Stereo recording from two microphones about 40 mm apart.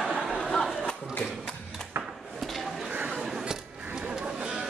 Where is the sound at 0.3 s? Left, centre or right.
Centre.